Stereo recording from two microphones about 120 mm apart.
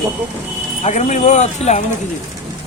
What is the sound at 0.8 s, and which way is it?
Speech, 70° left (ahead or behind).